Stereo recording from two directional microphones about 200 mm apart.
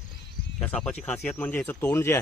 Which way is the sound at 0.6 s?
Centre (ahead or behind).